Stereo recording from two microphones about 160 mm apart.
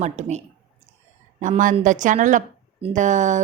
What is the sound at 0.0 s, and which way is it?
A woman's voice, 45° right (ahead or behind).